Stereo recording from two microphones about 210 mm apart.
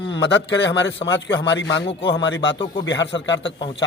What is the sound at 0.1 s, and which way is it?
A man's voice, 55° left (ahead or behind).